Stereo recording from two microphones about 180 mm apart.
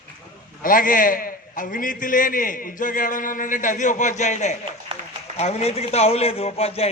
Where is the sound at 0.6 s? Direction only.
50° left (ahead or behind).